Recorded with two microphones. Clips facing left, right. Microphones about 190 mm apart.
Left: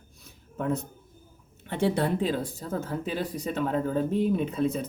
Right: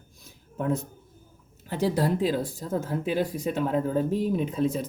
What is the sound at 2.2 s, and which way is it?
Speech, 10° right (ahead or behind).